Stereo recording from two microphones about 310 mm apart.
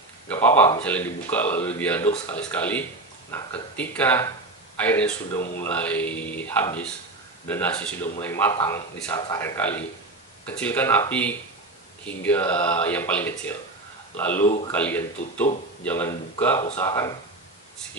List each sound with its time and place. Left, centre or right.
0.3 s a man's voice: centre